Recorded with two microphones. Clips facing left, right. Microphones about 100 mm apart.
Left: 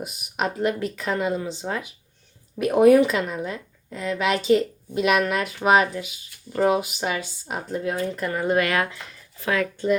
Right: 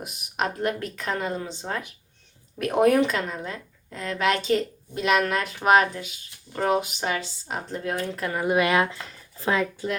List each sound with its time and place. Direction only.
0.0 s speech: 5° left (ahead or behind)
8.1 s speech: centre (ahead or behind)
8.5 s speech: 20° right (ahead or behind)